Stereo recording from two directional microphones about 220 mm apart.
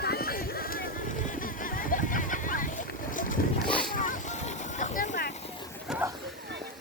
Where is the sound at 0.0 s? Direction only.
45° left (ahead or behind).